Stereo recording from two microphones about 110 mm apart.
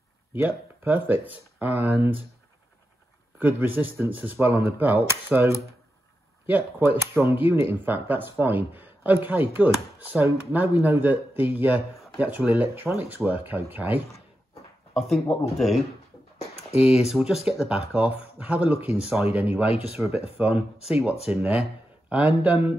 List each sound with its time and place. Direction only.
0.3 s speech: 15° right (ahead or behind)
3.3 s speech: 15° right (ahead or behind)
15.0 s speech: 5° left (ahead or behind)
16.3 s a sound: 65° left (ahead or behind)
17.1 s speech: 5° right (ahead or behind)